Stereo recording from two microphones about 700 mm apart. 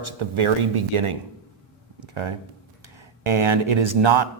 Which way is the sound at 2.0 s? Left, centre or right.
Right.